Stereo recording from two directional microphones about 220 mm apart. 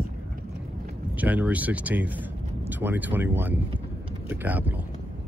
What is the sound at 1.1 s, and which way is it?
Speech, 5° right (ahead or behind).